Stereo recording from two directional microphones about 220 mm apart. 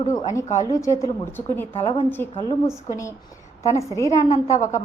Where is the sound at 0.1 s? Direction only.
15° left (ahead or behind).